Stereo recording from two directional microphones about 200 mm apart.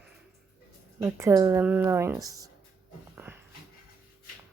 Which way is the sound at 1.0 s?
15° right (ahead or behind).